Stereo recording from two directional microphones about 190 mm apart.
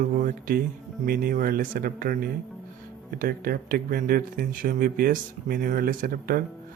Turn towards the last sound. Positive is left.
turn(degrees=-50)  # may be behind; listen again after turning